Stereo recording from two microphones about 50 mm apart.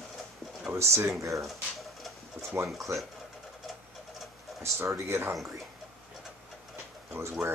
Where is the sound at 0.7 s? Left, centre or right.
Right.